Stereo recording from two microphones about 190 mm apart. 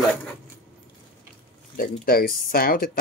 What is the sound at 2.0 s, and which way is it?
Speech, 50° left (ahead or behind).